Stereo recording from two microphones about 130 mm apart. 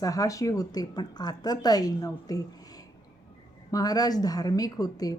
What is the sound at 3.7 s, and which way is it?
Speech, 30° left (ahead or behind).